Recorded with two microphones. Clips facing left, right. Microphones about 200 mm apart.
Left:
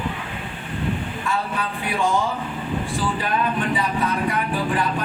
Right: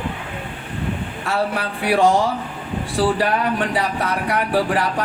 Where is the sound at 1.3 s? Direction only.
75° right (ahead or behind).